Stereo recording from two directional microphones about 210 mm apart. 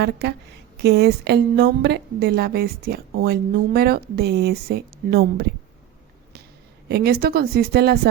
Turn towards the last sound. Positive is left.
turn(degrees=-50)  # may be behind; listen again after turning